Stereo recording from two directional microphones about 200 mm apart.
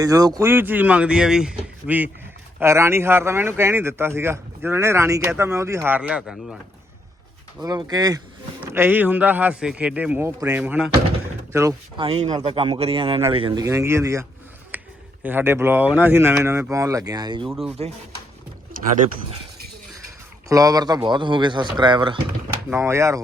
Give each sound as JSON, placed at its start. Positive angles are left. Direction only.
{"t": 0.0, "sound": "speech", "side_deg": -20}
{"t": 7.6, "sound": "speech", "side_deg": -20}
{"t": 11.5, "sound": "speech", "side_deg": -15}
{"t": 12.0, "sound": "speech", "side_deg": -30}
{"t": 14.7, "sound": "a sound", "side_deg": -10}
{"t": 15.2, "sound": "speech", "side_deg": -10}
{"t": 17.8, "sound": "speech", "side_deg": -30}
{"t": 20.5, "sound": "speech", "side_deg": -15}
{"t": 22.7, "sound": "speech", "side_deg": -15}